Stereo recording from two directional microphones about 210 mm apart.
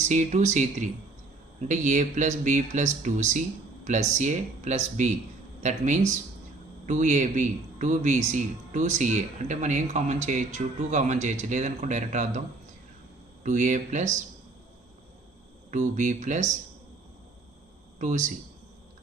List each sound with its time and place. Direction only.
0.1 s a man's voice: 35° right (ahead or behind)
13.4 s a man's voice: 35° right (ahead or behind)
15.7 s a man's voice: 35° right (ahead or behind)
18.0 s a man's voice: 35° right (ahead or behind)